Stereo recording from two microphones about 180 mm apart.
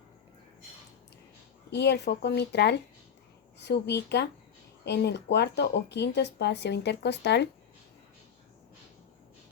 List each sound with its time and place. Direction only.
1.7 s speech: 65° left (ahead or behind)